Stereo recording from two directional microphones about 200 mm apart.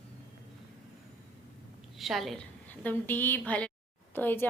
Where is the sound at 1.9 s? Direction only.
Centre (ahead or behind).